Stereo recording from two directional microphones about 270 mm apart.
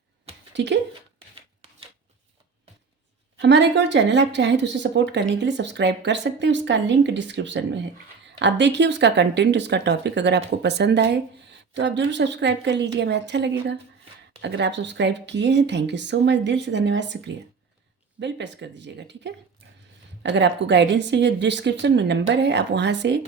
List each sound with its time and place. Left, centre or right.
0.5 s speech: right
3.3 s speech: right